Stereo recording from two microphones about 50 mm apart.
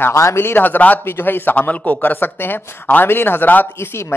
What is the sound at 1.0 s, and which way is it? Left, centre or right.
Speech, left.